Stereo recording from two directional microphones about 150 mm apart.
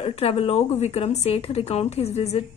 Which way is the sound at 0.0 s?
40° left (ahead or behind).